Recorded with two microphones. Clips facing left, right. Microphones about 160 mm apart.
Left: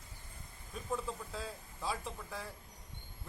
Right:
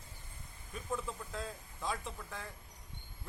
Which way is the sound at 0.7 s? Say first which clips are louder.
Left 1 dB; centre (ahead or behind).